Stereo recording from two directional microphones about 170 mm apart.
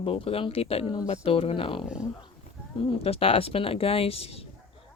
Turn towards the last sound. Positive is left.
turn(degrees=35)  # may be behind; listen again after turning